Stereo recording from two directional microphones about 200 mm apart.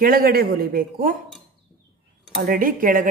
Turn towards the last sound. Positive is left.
turn(degrees=-45)  # may be behind; listen again after turning